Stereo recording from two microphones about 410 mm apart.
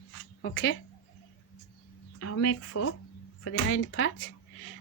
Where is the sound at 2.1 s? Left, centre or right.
Left.